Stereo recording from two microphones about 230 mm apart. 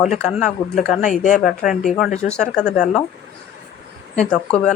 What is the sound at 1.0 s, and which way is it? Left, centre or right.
Speech, left.